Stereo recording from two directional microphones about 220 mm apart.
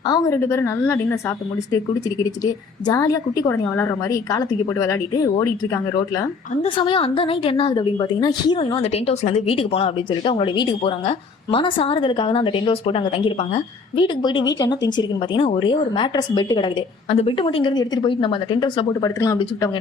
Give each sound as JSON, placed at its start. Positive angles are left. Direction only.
{"t": 0.1, "sound": "a woman's voice", "side_deg": 15}